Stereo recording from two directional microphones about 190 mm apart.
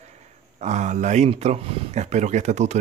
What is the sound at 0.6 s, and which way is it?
Speech, 40° right (ahead or behind).